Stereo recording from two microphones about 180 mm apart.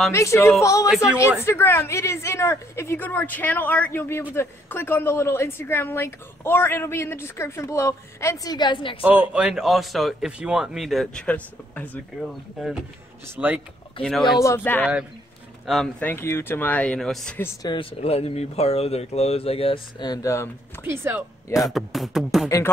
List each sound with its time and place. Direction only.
0.1 s speech: 15° left (ahead or behind)
0.8 s speech: 5° right (ahead or behind)
1.4 s speech: 15° left (ahead or behind)
9.0 s speech: 5° right (ahead or behind)
14.0 s speech: 30° left (ahead or behind)
14.4 s speech: 15° left (ahead or behind)
20.8 s speech: 15° right (ahead or behind)
21.5 s speech: centre (ahead or behind)